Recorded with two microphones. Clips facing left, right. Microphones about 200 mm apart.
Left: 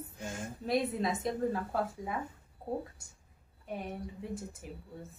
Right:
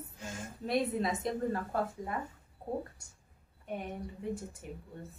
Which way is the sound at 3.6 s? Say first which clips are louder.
Even; centre (ahead or behind).